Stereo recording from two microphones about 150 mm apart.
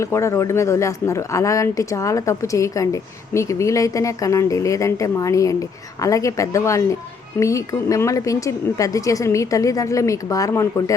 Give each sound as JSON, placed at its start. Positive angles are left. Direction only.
{"t": 0.0, "sound": "speech", "side_deg": 20}